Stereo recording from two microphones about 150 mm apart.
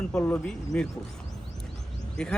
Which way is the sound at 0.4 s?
5° left (ahead or behind).